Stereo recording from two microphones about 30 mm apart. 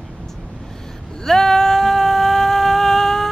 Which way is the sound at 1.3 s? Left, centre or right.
Centre.